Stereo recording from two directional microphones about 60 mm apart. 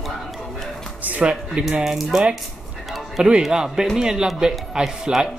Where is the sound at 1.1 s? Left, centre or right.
Right.